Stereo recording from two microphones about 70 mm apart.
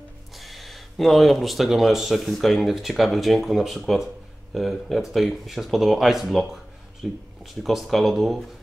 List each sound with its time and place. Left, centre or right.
0.4 s speech: centre